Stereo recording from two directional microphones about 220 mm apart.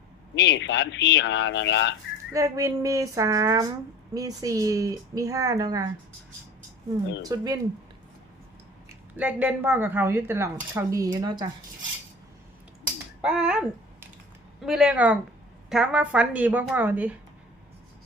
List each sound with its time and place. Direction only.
0.3 s speech: 55° left (ahead or behind)
2.3 s a woman's voice: 15° right (ahead or behind)
7.2 s a woman's voice: 15° right (ahead or behind)
9.1 s a woman's voice: 5° right (ahead or behind)
13.2 s a woman's voice: 5° right (ahead or behind)